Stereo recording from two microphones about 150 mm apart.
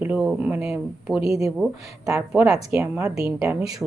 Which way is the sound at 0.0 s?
10° right (ahead or behind).